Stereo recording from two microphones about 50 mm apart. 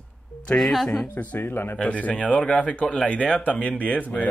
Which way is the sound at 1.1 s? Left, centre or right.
Left.